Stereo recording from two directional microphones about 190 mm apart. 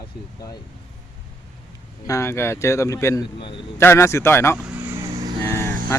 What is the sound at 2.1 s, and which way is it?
Speech, 15° left (ahead or behind).